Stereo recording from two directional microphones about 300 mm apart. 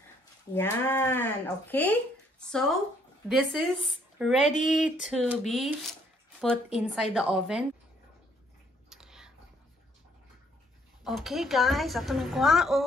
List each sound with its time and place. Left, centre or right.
0.6 s a woman's voice: centre
4.4 s speech: left
4.6 s a woman's voice: centre
8.9 s a sound: centre
11.1 s a woman's voice: centre